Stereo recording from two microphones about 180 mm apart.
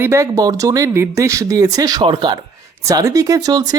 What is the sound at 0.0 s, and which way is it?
Speech, 15° right (ahead or behind).